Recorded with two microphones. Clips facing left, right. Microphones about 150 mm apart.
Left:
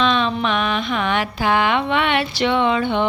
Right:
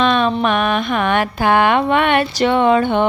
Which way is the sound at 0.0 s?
50° right (ahead or behind).